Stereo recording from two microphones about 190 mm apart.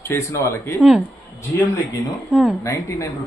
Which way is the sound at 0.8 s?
5° right (ahead or behind).